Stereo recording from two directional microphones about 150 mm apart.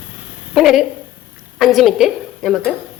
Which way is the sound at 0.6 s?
Centre (ahead or behind).